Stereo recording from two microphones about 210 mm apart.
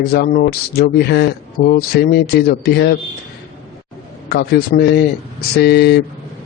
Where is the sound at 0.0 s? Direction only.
50° left (ahead or behind).